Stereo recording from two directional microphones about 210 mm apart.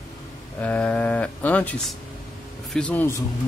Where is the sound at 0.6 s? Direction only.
5° left (ahead or behind).